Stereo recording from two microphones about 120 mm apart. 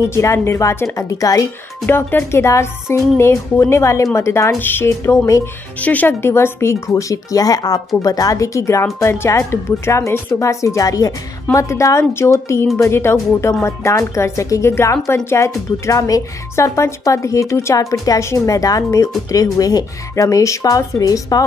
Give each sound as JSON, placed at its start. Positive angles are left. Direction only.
{"t": 0.1, "sound": "speech", "side_deg": 25}
{"t": 1.9, "sound": "speech", "side_deg": 15}